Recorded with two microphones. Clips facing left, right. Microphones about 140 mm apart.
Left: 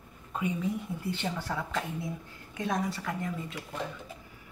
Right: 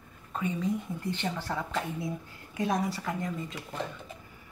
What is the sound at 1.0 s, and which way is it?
Speech, 10° left (ahead or behind).